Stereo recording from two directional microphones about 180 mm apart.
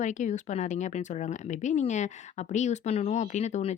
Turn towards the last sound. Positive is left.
turn(degrees=40)  # may be behind; listen again after turning